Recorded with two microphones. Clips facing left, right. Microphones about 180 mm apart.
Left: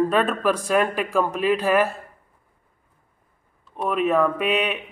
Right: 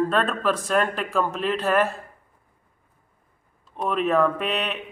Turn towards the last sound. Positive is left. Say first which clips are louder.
# left 4 dB
turn(degrees=10)  # may be behind; listen again after turning